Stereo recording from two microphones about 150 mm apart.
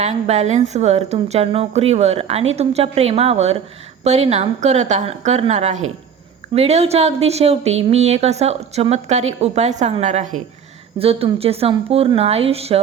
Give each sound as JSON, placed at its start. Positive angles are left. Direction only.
{"t": 0.0, "sound": "a woman's voice", "side_deg": -45}
{"t": 10.9, "sound": "a woman's voice", "side_deg": -40}